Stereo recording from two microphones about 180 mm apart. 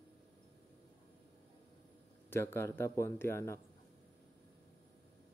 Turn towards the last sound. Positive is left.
turn(degrees=15)  # may be behind; listen again after turning